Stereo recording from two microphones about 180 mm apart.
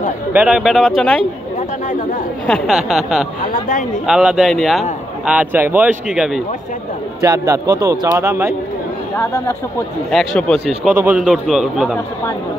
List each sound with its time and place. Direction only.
0.3 s a man's voice: 5° right (ahead or behind)
2.4 s a man's voice: centre (ahead or behind)
3.5 s speech: 50° left (ahead or behind)
4.0 s a man's voice: 5° right (ahead or behind)
7.2 s a man's voice: 15° right (ahead or behind)
9.1 s speech: 15° left (ahead or behind)
10.1 s a man's voice: 5° left (ahead or behind)
10.8 s a man's voice: 10° right (ahead or behind)